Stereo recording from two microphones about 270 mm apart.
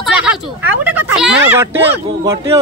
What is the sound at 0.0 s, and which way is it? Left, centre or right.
Speech, centre.